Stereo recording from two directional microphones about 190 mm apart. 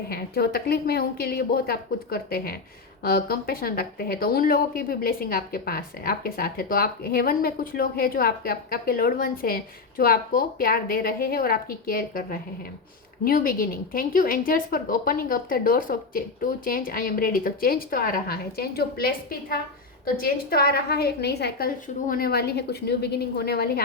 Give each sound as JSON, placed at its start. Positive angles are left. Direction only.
{"t": 0.1, "sound": "a woman's voice", "side_deg": 55}